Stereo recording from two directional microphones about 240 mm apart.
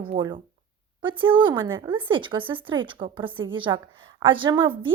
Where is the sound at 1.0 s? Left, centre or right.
Right.